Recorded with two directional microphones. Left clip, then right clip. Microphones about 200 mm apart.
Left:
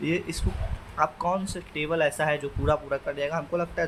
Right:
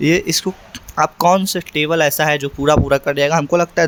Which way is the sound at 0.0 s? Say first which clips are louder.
Right 14 dB; 55° right (ahead or behind).